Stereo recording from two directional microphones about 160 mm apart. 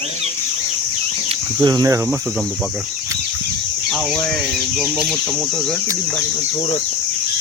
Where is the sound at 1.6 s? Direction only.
25° right (ahead or behind).